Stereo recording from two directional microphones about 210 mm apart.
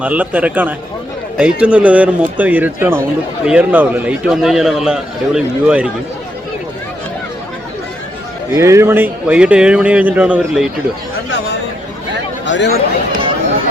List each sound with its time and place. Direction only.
0.0 s a man's voice: 5° right (ahead or behind)
8.5 s speech: 15° right (ahead or behind)
12.5 s speech: 55° left (ahead or behind)